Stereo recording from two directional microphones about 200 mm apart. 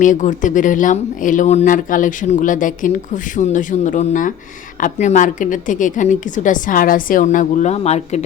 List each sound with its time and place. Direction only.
0.0 s a woman's voice: 40° left (ahead or behind)